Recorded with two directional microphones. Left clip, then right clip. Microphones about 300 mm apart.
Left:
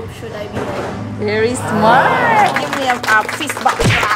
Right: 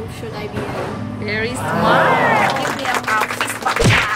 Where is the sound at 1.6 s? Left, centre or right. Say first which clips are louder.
Left 2 dB; centre.